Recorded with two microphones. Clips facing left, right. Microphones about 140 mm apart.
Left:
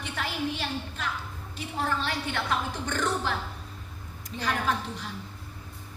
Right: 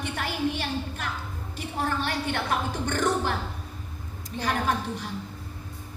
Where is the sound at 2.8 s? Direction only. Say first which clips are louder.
Right 3 dB; 50° right (ahead or behind).